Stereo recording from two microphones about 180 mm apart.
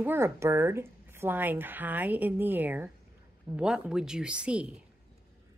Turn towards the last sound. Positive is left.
turn(degrees=-5)  # may be behind; listen again after turning